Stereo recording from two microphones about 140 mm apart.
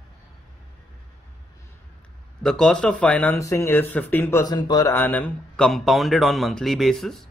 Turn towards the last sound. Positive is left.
turn(degrees=0)  # may be behind; listen again after turning